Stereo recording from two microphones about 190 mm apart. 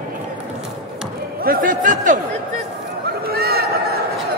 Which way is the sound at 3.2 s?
55° right (ahead or behind).